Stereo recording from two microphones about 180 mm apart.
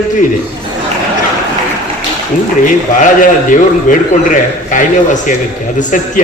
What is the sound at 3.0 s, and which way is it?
A man's voice, 45° left (ahead or behind).